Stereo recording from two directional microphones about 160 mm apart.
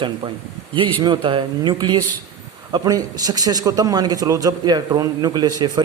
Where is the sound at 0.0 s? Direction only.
30° right (ahead or behind).